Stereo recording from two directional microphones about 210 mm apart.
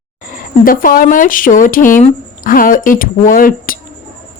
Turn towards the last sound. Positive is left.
turn(degrees=40)  # may be behind; listen again after turning